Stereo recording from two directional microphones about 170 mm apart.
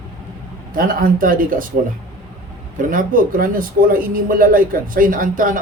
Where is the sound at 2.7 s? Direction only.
55° right (ahead or behind).